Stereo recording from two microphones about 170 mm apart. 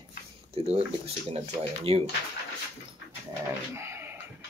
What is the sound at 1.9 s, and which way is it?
Speech, 35° right (ahead or behind).